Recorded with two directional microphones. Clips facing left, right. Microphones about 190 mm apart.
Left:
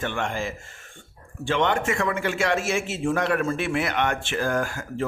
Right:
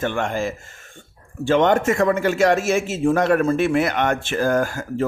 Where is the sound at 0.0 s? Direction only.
40° right (ahead or behind).